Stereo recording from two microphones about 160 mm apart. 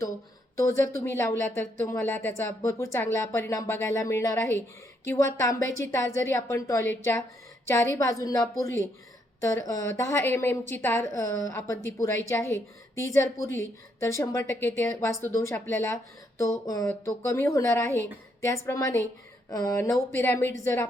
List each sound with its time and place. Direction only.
0.5 s a woman's voice: 20° left (ahead or behind)